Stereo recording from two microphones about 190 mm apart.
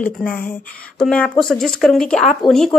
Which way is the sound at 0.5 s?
5° left (ahead or behind).